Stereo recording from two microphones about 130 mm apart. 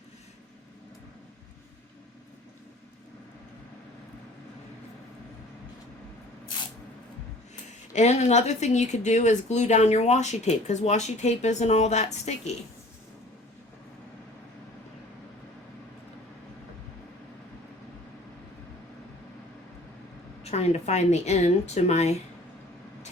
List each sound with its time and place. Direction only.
7.9 s speech: 60° left (ahead or behind)
20.4 s speech: 55° left (ahead or behind)